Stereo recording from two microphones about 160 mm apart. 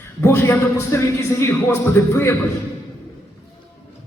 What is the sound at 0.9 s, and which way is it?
Speech, 15° left (ahead or behind).